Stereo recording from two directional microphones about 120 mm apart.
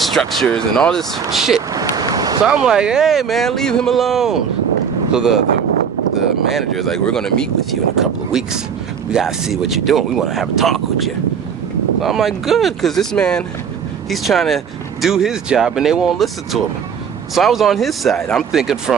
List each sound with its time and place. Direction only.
0.0 s speech: centre (ahead or behind)
1.7 s vehicle: 30° right (ahead or behind)
2.4 s speech: 5° right (ahead or behind)